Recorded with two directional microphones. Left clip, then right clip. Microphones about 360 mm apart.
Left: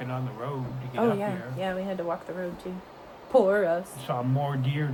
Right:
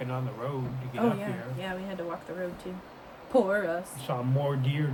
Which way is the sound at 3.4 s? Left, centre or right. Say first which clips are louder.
Left 5 dB; centre.